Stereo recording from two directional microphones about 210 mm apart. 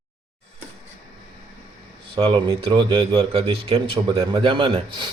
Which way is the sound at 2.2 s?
25° right (ahead or behind).